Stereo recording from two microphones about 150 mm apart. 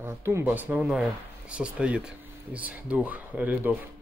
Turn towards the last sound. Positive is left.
turn(degrees=-10)  # may be behind; listen again after turning